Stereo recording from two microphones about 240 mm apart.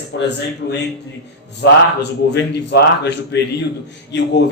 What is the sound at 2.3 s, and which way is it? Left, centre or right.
A man's voice, left.